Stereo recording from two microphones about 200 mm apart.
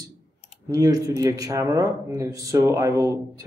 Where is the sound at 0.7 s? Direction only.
20° right (ahead or behind).